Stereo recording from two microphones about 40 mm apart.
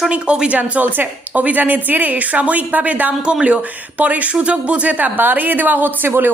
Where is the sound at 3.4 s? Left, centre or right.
Right.